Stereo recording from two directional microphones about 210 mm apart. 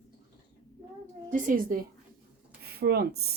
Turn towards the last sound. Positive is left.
turn(degrees=-50)  # may be behind; listen again after turning